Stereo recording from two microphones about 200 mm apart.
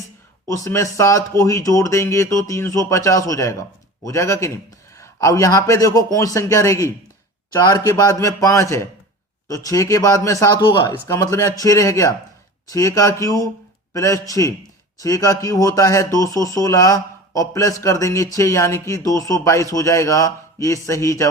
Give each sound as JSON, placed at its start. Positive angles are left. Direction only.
{"t": 0.4, "sound": "speech", "side_deg": 15}